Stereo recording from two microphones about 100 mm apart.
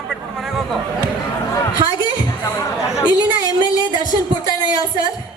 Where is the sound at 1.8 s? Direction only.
50° right (ahead or behind).